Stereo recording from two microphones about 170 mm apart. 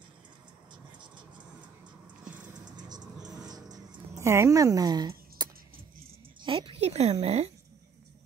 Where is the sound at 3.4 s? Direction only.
25° right (ahead or behind).